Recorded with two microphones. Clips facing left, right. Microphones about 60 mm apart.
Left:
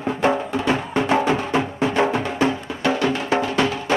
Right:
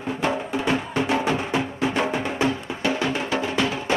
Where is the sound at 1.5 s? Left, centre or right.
Left.